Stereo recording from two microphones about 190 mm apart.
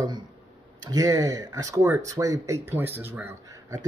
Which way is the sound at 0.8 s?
20° right (ahead or behind).